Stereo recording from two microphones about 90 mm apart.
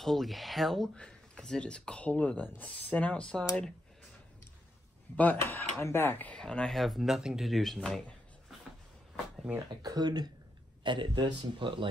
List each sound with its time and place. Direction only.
0.0 s speech: centre (ahead or behind)
5.1 s speech: 20° left (ahead or behind)
6.3 s speech: 10° left (ahead or behind)
9.7 s speech: 50° right (ahead or behind)
10.8 s a man's voice: 60° right (ahead or behind)